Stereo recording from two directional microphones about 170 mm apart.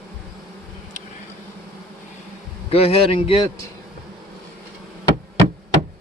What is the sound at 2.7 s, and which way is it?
Speech, 35° left (ahead or behind).